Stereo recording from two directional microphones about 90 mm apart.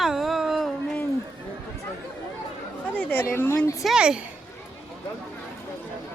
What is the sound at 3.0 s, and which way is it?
Speech, 20° left (ahead or behind).